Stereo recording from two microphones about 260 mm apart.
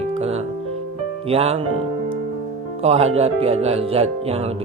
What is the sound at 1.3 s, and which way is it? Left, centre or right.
Speech, right.